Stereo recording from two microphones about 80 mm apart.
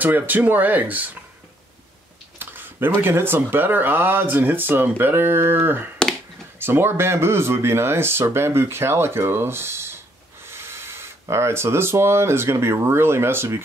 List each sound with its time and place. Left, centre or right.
0.0 s speech: right
2.3 s a sound: right
3.0 s speech: right